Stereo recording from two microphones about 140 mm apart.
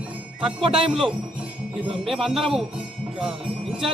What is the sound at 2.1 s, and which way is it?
Speech, centre (ahead or behind).